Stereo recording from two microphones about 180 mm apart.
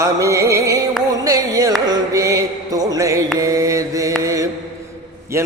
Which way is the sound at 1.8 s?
20° right (ahead or behind).